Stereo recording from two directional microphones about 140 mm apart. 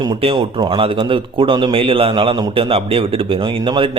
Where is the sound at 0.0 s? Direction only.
35° right (ahead or behind).